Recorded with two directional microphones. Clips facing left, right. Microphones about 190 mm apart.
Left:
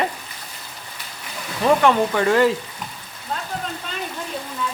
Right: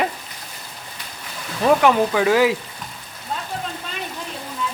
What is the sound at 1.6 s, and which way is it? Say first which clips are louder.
Speech: right 1 dB; 5° right (ahead or behind).